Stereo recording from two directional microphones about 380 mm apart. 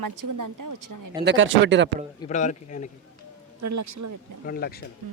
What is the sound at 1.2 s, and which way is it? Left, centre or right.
Speech, right.